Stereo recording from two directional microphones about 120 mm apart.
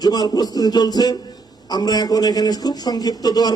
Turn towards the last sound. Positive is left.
turn(degrees=35)  # may be behind; listen again after turning